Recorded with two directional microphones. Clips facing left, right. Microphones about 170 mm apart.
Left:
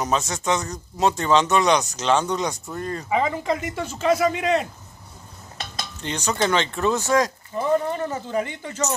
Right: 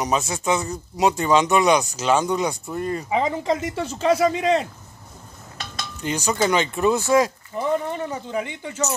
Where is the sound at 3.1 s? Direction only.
30° right (ahead or behind).